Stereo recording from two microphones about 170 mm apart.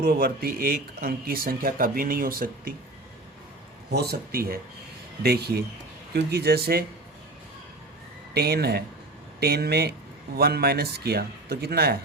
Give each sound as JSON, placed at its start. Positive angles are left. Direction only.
{"t": 0.0, "sound": "speech", "side_deg": -60}
{"t": 3.9, "sound": "speech", "side_deg": -70}
{"t": 8.3, "sound": "speech", "side_deg": -70}